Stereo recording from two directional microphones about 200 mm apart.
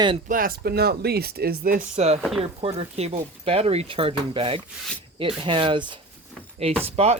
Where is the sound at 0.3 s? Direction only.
45° right (ahead or behind).